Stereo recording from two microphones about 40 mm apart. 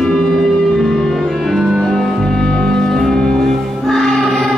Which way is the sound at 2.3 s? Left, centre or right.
Centre.